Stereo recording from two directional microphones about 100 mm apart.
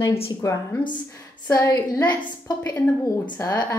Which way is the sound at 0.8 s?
55° left (ahead or behind).